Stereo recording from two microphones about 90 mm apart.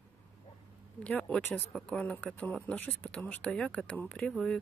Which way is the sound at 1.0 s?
15° left (ahead or behind).